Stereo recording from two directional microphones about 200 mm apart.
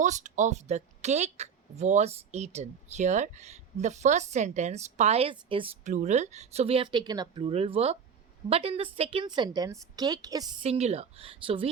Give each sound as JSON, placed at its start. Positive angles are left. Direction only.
{"t": 0.0, "sound": "a woman's voice", "side_deg": -35}
{"t": 10.6, "sound": "a woman's voice", "side_deg": -30}